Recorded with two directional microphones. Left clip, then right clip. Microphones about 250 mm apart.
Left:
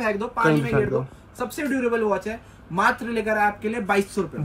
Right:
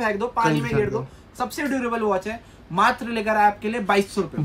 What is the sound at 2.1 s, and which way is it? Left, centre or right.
Speech, centre.